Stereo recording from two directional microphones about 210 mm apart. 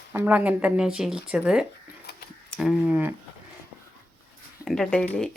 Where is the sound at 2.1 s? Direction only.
50° left (ahead or behind).